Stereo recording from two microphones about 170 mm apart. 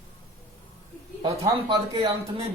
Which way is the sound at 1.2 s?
20° right (ahead or behind).